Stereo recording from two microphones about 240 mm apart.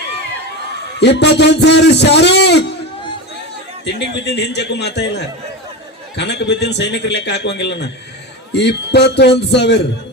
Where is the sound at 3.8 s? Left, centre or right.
Left.